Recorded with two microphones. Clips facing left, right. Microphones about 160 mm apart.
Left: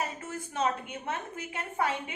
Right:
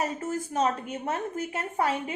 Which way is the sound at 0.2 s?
40° right (ahead or behind).